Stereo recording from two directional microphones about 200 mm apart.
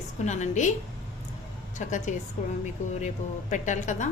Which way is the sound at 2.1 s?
40° left (ahead or behind).